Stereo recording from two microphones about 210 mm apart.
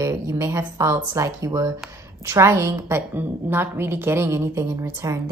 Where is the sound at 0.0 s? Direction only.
15° right (ahead or behind).